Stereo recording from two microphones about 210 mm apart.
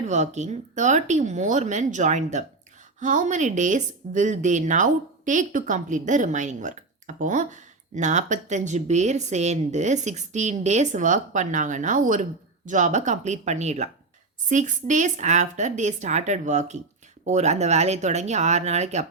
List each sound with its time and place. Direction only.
0.1 s speech: 35° right (ahead or behind)